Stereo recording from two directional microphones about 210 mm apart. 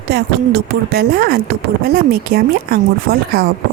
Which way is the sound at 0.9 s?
45° right (ahead or behind).